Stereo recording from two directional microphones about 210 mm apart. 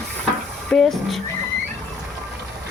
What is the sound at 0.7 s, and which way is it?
Speech, centre (ahead or behind).